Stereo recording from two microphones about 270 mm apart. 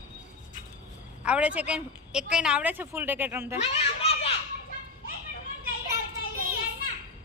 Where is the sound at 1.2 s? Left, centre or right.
Centre.